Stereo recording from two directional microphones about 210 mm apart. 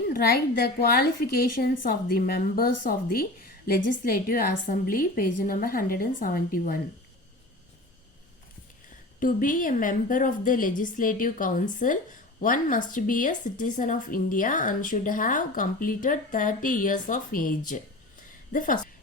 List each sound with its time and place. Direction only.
0.1 s a woman's voice: 50° left (ahead or behind)
9.2 s speech: 40° left (ahead or behind)